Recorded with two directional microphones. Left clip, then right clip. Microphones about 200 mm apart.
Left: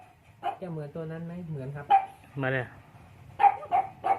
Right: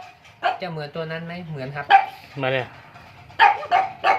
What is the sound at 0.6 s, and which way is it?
Speech, 20° right (ahead or behind).